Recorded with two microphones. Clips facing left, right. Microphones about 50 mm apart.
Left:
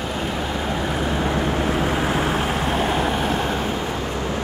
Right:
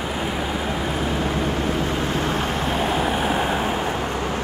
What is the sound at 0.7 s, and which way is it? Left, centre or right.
Vehicle, centre.